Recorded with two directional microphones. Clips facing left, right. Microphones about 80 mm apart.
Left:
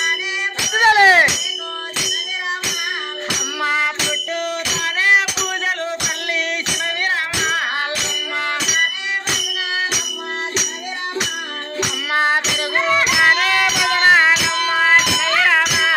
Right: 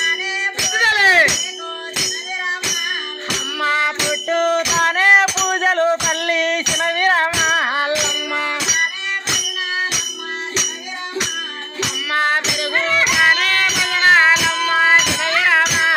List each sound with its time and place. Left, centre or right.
0.8 s a sound: left
3.6 s music: centre
4.3 s music: right
5.5 s music: right
7.6 s music: right
12.1 s music: centre
13.2 s music: centre